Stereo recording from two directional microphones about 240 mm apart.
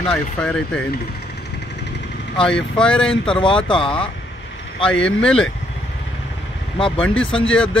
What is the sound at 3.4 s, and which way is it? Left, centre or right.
Speech, left.